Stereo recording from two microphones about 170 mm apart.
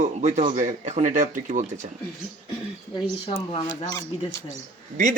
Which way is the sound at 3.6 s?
20° left (ahead or behind).